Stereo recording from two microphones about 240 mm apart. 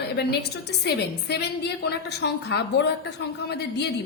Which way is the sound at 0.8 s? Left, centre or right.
Left.